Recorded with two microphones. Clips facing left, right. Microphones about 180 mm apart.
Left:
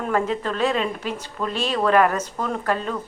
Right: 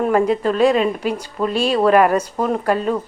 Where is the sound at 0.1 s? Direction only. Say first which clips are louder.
Right 7 dB; 10° right (ahead or behind).